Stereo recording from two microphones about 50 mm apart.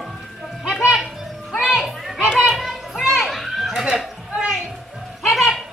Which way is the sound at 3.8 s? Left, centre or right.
Centre.